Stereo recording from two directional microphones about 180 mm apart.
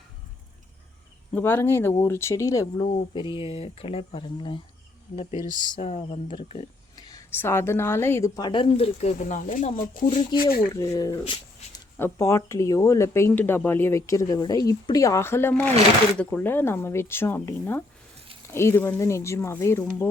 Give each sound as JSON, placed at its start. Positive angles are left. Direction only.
{"t": 1.3, "sound": "speech", "side_deg": 10}
{"t": 3.2, "sound": "a woman's voice", "side_deg": 30}
{"t": 5.1, "sound": "speech", "side_deg": 40}
{"t": 6.9, "sound": "a woman's voice", "side_deg": 20}
{"t": 10.8, "sound": "a woman's voice", "side_deg": 20}
{"t": 11.9, "sound": "speech", "side_deg": 15}